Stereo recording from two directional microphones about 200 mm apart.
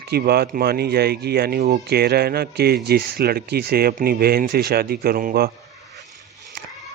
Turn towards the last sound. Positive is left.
turn(degrees=-45)  # may be behind; listen again after turning